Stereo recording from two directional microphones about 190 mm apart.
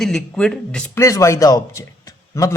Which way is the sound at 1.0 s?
15° left (ahead or behind).